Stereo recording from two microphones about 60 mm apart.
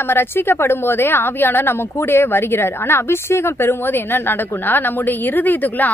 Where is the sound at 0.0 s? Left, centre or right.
Left.